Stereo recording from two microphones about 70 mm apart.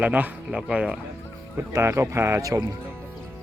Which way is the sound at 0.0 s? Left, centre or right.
Centre.